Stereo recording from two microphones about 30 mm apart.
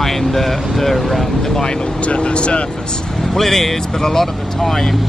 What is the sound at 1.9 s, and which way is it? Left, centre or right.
Speech, left.